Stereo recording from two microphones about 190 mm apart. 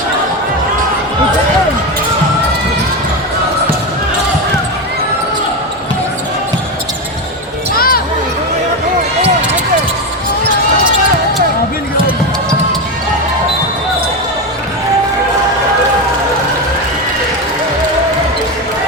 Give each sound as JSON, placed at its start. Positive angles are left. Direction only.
{"t": 7.8, "sound": "basketball bounce", "side_deg": 50}